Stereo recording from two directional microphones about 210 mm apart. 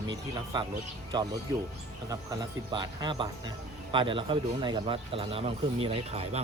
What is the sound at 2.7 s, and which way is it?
A man's voice, 20° right (ahead or behind).